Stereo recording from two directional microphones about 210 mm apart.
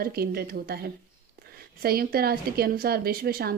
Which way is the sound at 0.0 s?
45° right (ahead or behind).